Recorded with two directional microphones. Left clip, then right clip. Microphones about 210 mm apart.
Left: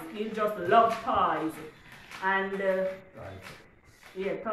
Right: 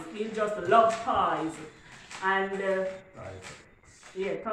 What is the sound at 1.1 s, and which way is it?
Speech, centre (ahead or behind).